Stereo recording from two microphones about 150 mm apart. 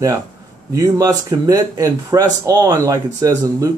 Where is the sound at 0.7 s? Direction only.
20° right (ahead or behind).